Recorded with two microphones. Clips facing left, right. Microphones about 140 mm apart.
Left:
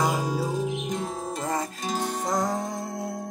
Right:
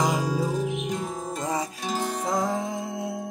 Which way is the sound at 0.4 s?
5° left (ahead or behind).